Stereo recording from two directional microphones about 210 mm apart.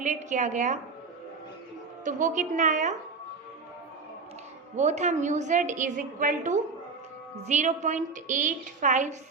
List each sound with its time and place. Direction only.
0.0 s a woman's voice: 35° right (ahead or behind)
2.0 s a woman's voice: 35° right (ahead or behind)
4.8 s a woman's voice: 35° right (ahead or behind)